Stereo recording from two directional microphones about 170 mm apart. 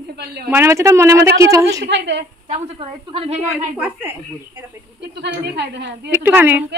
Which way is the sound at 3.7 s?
10° right (ahead or behind).